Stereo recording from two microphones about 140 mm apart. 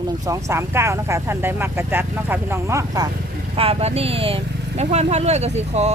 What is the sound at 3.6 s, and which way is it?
Speech, 45° right (ahead or behind).